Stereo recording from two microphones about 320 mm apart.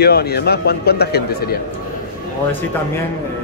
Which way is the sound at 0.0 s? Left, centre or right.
Left.